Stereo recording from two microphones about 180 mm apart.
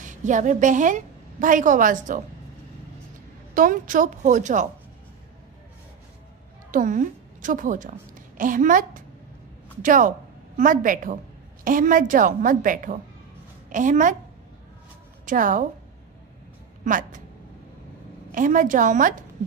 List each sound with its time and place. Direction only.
0.0 s a woman's voice: 45° right (ahead or behind)
3.5 s a woman's voice: 50° right (ahead or behind)
6.7 s a woman's voice: 45° right (ahead or behind)
15.2 s a woman's voice: 45° right (ahead or behind)
16.8 s a woman's voice: 45° right (ahead or behind)
18.3 s a woman's voice: 45° right (ahead or behind)